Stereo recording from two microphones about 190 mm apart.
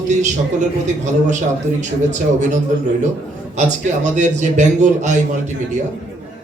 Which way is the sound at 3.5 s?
40° right (ahead or behind).